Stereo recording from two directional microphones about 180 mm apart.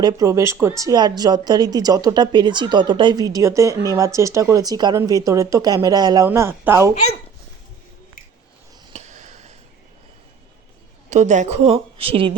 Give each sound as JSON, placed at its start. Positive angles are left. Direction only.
{"t": 0.0, "sound": "speech", "side_deg": -20}
{"t": 8.9, "sound": "a sound", "side_deg": -40}
{"t": 11.1, "sound": "a woman's voice", "side_deg": -40}